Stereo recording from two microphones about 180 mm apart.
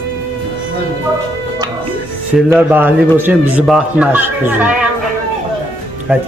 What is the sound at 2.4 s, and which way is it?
Speech, 10° right (ahead or behind).